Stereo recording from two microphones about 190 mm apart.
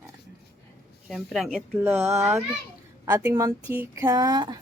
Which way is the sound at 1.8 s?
10° right (ahead or behind).